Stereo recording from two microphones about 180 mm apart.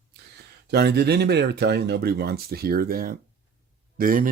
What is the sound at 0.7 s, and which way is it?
Speech, 65° right (ahead or behind).